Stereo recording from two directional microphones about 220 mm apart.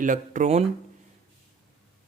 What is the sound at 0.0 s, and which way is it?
Speech, 35° right (ahead or behind).